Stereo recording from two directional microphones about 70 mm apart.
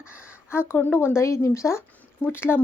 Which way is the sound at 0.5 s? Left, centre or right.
Left.